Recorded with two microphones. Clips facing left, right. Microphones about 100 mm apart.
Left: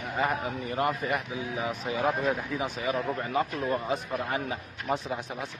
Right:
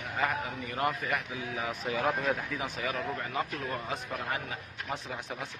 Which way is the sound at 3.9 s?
10° left (ahead or behind).